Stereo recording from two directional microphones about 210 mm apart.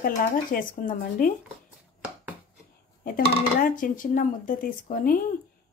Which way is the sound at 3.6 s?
40° left (ahead or behind).